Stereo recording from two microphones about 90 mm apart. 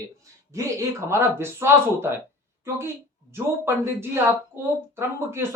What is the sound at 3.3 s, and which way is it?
A man's voice, 25° right (ahead or behind).